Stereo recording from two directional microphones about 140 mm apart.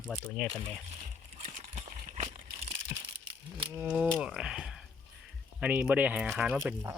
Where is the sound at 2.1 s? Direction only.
55° right (ahead or behind).